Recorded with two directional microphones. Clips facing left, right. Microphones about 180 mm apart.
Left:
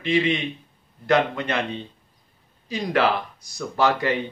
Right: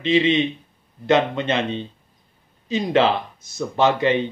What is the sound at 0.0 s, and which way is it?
Mantra, 20° right (ahead or behind).